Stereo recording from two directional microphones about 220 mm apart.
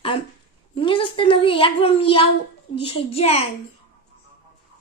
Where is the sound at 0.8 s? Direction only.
25° left (ahead or behind).